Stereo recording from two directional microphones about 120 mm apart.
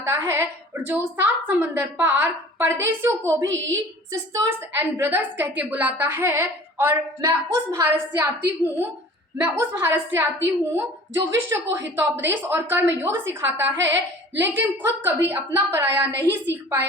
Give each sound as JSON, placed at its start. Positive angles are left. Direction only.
{"t": 0.0, "sound": "a woman's voice", "side_deg": -25}
{"t": 4.7, "sound": "a woman's voice", "side_deg": -20}